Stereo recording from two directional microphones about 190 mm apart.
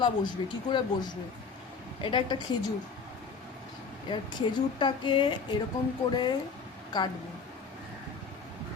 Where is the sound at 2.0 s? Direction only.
25° left (ahead or behind).